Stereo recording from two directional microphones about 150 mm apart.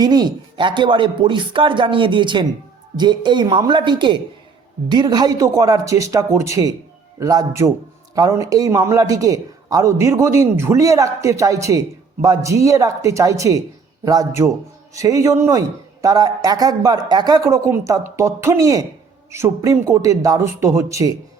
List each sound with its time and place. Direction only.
0.0 s a man's voice: 25° right (ahead or behind)